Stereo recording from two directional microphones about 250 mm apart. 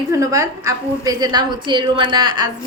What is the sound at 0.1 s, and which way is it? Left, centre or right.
A woman's voice, centre.